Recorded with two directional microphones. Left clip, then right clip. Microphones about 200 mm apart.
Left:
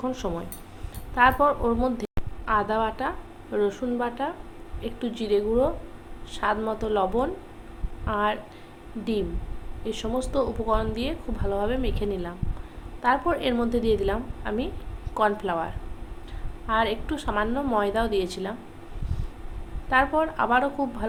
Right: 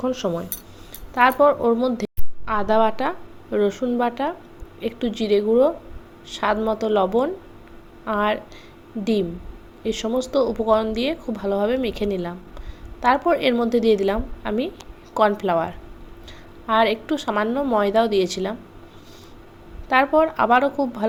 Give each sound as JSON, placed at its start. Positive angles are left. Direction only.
{"t": 0.0, "sound": "a woman's voice", "side_deg": -25}
{"t": 9.8, "sound": "a woman's voice", "side_deg": -30}
{"t": 19.9, "sound": "speech", "side_deg": -30}